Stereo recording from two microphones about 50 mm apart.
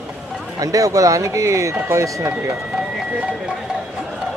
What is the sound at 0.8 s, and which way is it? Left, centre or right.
Speech, right.